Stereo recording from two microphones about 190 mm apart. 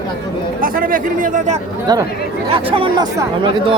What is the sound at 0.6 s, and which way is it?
Speech, 45° right (ahead or behind).